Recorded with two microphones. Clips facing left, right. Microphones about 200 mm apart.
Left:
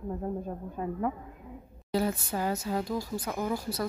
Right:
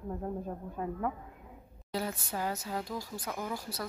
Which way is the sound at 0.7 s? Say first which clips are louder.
Left 3 dB; 5° left (ahead or behind).